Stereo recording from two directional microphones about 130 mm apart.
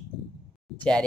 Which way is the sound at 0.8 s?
10° left (ahead or behind).